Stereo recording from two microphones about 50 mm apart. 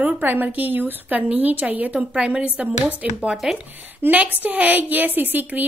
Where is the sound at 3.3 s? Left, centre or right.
Centre.